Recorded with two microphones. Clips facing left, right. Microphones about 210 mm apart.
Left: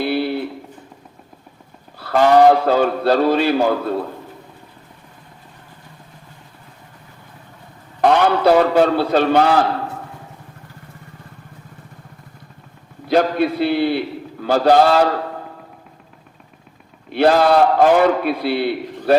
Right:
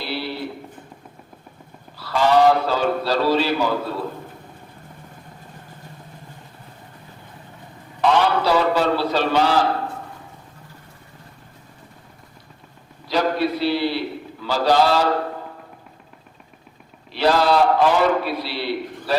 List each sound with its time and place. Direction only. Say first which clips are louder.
0.0 s a sound: left 8 dB; 55° left (ahead or behind)
2.0 s a man's voice: left 4 dB; 55° left (ahead or behind)
8.0 s a man's voice: left 4 dB; 55° left (ahead or behind)
13.1 s a man's voice: left 4 dB; 55° left (ahead or behind)
17.1 s a man's voice: left 4 dB; 55° left (ahead or behind)